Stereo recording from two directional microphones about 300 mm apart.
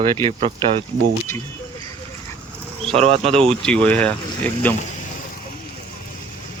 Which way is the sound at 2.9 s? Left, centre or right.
Centre.